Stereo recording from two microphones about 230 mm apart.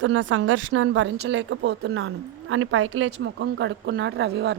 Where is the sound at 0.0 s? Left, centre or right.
Right.